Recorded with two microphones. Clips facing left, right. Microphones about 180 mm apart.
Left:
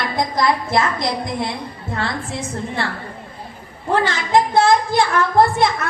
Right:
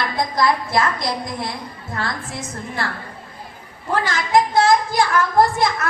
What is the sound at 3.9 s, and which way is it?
A woman's voice, 30° left (ahead or behind).